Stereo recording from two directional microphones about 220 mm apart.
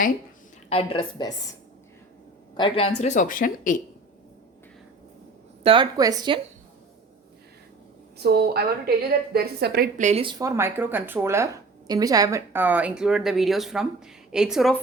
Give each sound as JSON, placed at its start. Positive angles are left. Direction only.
{"t": 0.7, "sound": "a woman's voice", "side_deg": 25}
{"t": 2.6, "sound": "a woman's voice", "side_deg": 25}
{"t": 3.0, "sound": "speech", "side_deg": 35}
{"t": 5.6, "sound": "speech", "side_deg": -20}
{"t": 8.2, "sound": "a woman's voice", "side_deg": -45}